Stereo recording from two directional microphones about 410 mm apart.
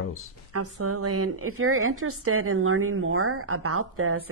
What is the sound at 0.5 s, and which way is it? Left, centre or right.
A woman's voice, right.